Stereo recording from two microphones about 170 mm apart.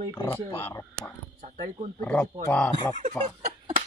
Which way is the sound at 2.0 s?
5° left (ahead or behind).